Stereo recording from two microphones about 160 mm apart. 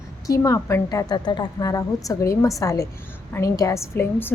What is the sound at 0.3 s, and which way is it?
A woman's voice, 20° left (ahead or behind).